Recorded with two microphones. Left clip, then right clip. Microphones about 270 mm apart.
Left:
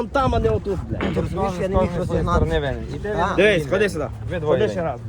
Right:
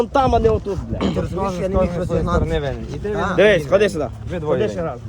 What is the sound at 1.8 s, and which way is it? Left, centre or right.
Speech, centre.